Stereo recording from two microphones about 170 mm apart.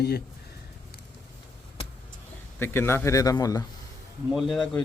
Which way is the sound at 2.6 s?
15° left (ahead or behind).